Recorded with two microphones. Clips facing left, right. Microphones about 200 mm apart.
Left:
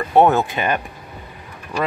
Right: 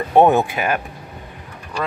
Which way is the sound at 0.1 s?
15° right (ahead or behind).